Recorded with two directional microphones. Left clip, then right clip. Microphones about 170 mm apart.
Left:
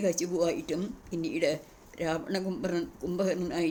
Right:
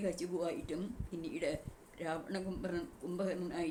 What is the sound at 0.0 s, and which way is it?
Speech, 55° left (ahead or behind).